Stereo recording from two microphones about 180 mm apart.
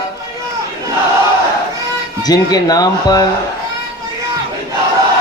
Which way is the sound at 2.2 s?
20° left (ahead or behind).